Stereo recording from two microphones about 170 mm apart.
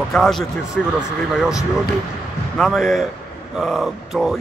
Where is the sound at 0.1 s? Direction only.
Centre (ahead or behind).